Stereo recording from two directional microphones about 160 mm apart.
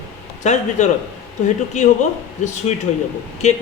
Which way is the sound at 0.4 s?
45° left (ahead or behind).